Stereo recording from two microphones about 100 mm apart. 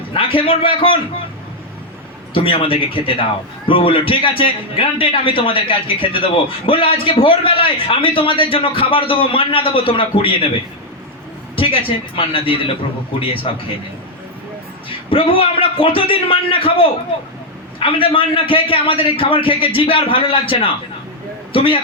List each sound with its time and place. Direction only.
0.1 s a man's voice: 60° left (ahead or behind)
2.3 s a man's voice: 65° left (ahead or behind)
11.5 s a man's voice: 65° left (ahead or behind)
14.8 s a man's voice: 60° left (ahead or behind)